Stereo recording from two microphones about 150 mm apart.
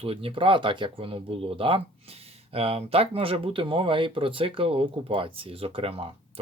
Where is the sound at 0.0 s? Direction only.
40° right (ahead or behind).